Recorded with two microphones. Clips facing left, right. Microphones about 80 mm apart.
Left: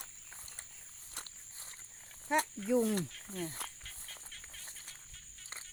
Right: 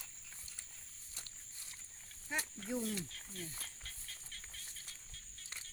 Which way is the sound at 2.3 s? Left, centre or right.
Left.